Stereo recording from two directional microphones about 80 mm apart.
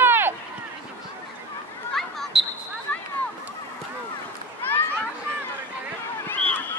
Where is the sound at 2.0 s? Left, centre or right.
Centre.